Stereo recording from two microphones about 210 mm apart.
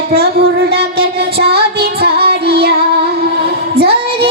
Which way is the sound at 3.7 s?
50° right (ahead or behind).